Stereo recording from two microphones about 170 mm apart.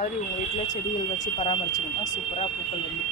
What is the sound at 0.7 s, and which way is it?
Speech, 45° left (ahead or behind).